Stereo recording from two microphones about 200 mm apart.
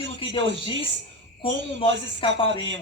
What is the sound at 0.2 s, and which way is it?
Music, 25° left (ahead or behind).